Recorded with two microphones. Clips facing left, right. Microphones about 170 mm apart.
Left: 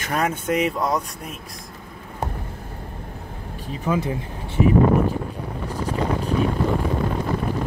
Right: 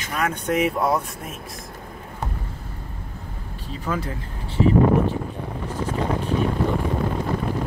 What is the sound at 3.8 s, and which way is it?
Speech, 15° left (ahead or behind).